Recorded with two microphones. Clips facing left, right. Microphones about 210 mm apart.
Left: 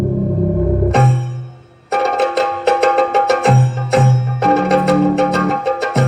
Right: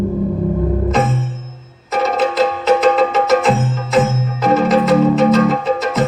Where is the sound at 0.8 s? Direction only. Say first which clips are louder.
Left 1 dB; 60° left (ahead or behind).